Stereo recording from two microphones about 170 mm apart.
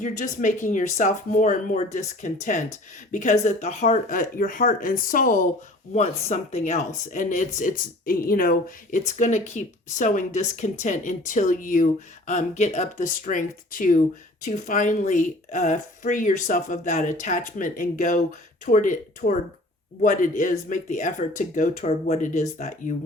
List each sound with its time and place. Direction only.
0.0 s speech: 45° left (ahead or behind)
5.9 s speech: 40° left (ahead or behind)
19.2 s speech: 65° left (ahead or behind)
20.0 s speech: 50° left (ahead or behind)